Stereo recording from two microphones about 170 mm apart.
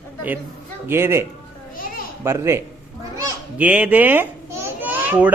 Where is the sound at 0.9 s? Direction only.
15° right (ahead or behind).